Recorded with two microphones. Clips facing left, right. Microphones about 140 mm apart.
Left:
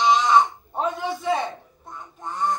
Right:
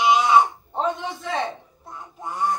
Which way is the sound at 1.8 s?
10° right (ahead or behind).